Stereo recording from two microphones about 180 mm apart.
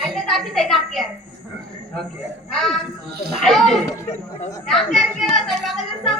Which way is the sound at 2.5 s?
Centre (ahead or behind).